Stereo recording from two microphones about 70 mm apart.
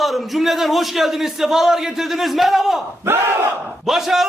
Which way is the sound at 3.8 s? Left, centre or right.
Centre.